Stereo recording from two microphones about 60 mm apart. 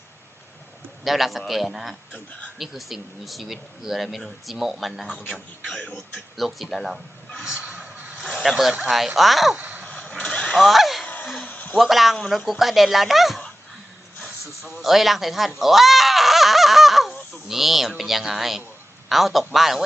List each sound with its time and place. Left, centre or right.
1.0 s speech: centre
7.6 s a sound: right
8.4 s speech: centre
9.6 s babbling: right
9.8 s vehicle: left
10.5 s honk: centre
11.0 s a sound: left
11.8 s speech: centre
14.8 s a sound: centre
17.5 s a man's voice: centre